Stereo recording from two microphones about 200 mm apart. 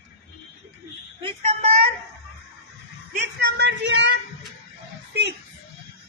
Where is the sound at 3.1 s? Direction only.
55° right (ahead or behind).